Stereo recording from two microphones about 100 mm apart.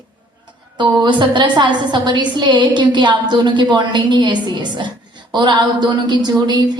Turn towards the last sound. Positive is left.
turn(degrees=-45)  # may be behind; listen again after turning